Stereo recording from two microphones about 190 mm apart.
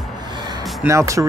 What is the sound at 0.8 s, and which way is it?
Speech, 15° right (ahead or behind).